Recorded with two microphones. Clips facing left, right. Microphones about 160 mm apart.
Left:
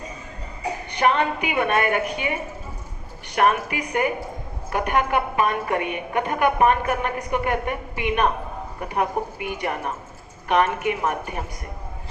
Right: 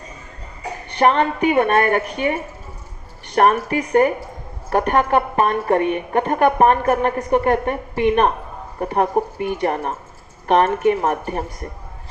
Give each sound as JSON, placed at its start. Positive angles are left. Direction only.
{"t": 0.9, "sound": "a woman's voice", "side_deg": -45}